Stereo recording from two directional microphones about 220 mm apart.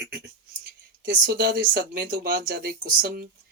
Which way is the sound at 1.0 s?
40° right (ahead or behind).